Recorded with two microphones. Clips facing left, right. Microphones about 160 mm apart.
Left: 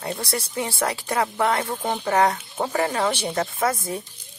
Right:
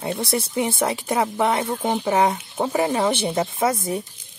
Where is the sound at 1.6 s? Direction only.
5° right (ahead or behind).